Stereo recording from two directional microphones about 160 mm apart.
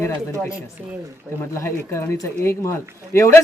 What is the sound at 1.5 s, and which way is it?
Speech, 15° left (ahead or behind).